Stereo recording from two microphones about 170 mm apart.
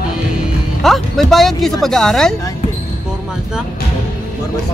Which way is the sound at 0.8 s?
Centre (ahead or behind).